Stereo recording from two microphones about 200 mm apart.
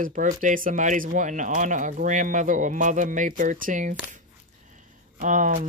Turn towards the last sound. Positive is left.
turn(degrees=-40)  # may be behind; listen again after turning